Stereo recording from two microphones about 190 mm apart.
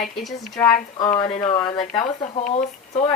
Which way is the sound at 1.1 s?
25° left (ahead or behind).